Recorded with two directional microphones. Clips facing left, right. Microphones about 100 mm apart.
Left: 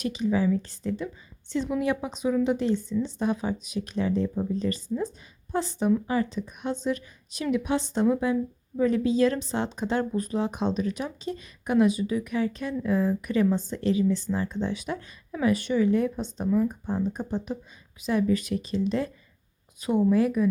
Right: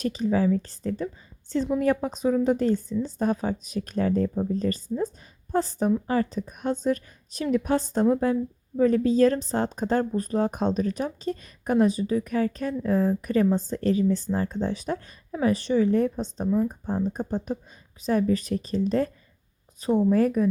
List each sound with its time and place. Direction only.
0.0 s speech: 40° right (ahead or behind)